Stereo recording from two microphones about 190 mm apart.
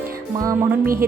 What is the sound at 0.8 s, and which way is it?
Speech, 50° right (ahead or behind).